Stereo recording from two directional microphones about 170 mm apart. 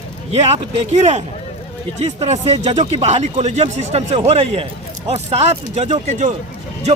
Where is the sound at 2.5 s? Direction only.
40° right (ahead or behind).